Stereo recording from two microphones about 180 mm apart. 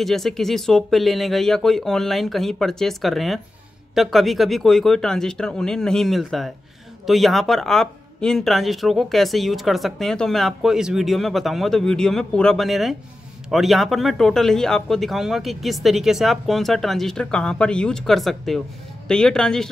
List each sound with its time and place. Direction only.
0.0 s speech: centre (ahead or behind)